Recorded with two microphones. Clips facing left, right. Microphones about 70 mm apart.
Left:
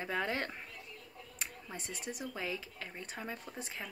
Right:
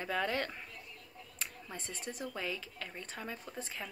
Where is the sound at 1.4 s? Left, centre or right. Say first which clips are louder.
Even; centre.